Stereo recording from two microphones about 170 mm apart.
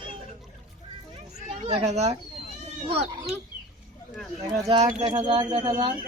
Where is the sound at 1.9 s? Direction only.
40° right (ahead or behind).